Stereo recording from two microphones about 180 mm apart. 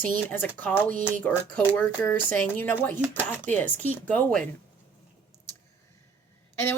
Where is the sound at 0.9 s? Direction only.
50° right (ahead or behind).